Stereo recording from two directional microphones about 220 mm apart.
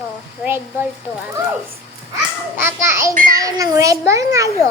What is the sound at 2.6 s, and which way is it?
Child singing, 10° right (ahead or behind).